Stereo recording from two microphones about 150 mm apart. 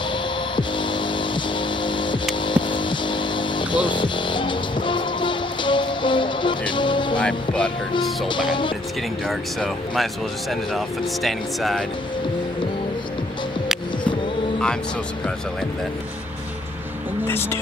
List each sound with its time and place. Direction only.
0.6 s music: 35° left (ahead or behind)
1.9 s a sound: 30° left (ahead or behind)
2.4 s music: 35° left (ahead or behind)
7.2 s music: 5° left (ahead or behind)
9.3 s speech: centre (ahead or behind)
11.2 s speech: centre (ahead or behind)
17.3 s speech: 15° left (ahead or behind)